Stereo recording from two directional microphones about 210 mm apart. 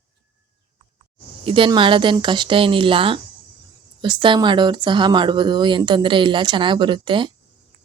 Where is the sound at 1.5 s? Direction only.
25° right (ahead or behind).